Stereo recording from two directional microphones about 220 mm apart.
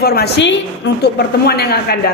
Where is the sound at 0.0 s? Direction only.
45° left (ahead or behind).